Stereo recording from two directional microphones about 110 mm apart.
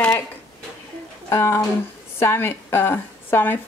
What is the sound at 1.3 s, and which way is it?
A woman's voice, 25° left (ahead or behind).